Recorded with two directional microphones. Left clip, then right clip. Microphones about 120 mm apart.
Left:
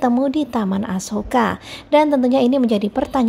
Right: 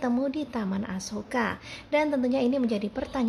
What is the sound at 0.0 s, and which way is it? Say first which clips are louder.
A woman's voice: left 10 dB; 45° left (ahead or behind).